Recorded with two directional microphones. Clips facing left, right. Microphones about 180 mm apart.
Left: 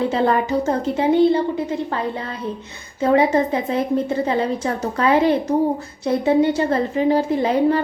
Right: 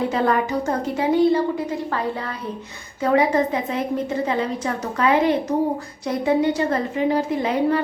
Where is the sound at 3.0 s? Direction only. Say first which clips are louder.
Left 2 dB; 30° left (ahead or behind).